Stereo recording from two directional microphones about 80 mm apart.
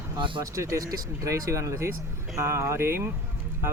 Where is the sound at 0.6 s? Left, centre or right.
Right.